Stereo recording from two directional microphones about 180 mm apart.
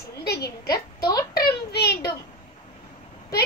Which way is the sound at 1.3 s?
65° left (ahead or behind).